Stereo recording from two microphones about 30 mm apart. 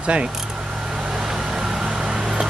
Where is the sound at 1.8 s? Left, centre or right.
Centre.